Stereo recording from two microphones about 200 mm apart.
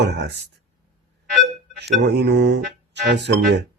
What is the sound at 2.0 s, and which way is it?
Speech, 60° right (ahead or behind).